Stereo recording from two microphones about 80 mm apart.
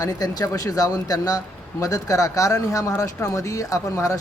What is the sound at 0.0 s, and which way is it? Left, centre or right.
Speech, left.